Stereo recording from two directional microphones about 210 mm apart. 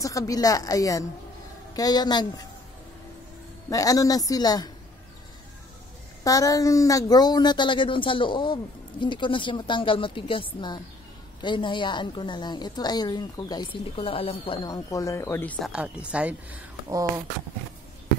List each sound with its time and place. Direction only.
0.0 s a woman's voice: 15° left (ahead or behind)
3.7 s a woman's voice: 15° left (ahead or behind)
6.2 s a woman's voice: 15° left (ahead or behind)
15.6 s speech: 5° right (ahead or behind)